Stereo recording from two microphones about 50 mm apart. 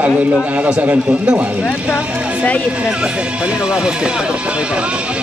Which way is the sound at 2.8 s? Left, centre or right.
Right.